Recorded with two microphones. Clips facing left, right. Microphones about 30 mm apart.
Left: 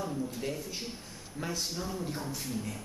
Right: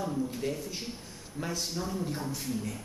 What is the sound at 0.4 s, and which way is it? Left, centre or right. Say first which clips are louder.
A man's voice: right 2 dB; centre.